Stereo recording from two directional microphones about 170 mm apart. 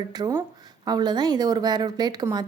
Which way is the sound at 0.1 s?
25° right (ahead or behind).